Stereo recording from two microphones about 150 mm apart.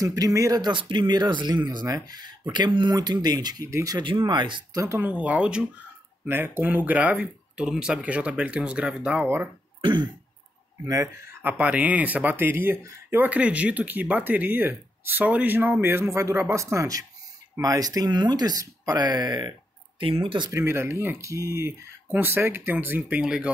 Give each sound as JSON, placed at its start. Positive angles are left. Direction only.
{"t": 0.0, "sound": "speech", "side_deg": -25}
{"t": 4.8, "sound": "speech", "side_deg": -15}
{"t": 11.4, "sound": "speech", "side_deg": -10}
{"t": 20.5, "sound": "speech", "side_deg": -15}